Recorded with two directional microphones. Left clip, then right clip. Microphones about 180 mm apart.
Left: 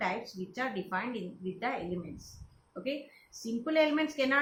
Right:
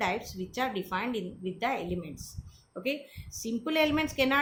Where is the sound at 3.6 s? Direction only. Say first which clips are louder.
Even; 60° right (ahead or behind).